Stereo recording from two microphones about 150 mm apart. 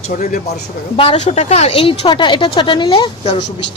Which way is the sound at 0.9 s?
40° left (ahead or behind).